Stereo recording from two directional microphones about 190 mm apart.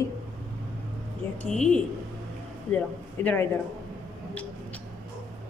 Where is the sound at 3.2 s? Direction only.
10° left (ahead or behind).